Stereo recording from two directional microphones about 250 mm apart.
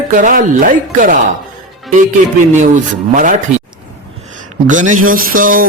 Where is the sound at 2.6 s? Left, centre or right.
Right.